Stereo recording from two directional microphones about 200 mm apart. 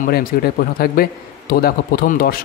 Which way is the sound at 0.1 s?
50° left (ahead or behind).